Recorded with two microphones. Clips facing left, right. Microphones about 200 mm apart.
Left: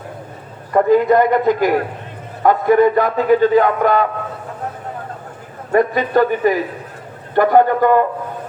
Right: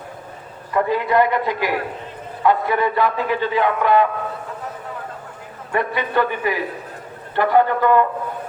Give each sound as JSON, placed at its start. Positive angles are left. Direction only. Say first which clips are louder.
{"t": 0.7, "sound": "a man's voice", "louder": "left 7 dB", "side_deg": 45}
{"t": 5.7, "sound": "a man's voice", "louder": "left 6 dB", "side_deg": 40}